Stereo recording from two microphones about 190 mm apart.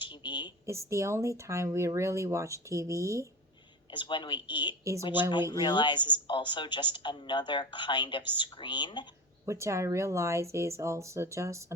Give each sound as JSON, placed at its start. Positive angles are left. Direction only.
{"t": 0.0, "sound": "a sound", "side_deg": 25}
{"t": 0.6, "sound": "speech", "side_deg": -15}
{"t": 3.9, "sound": "speech", "side_deg": 25}
{"t": 9.5, "sound": "speech", "side_deg": -15}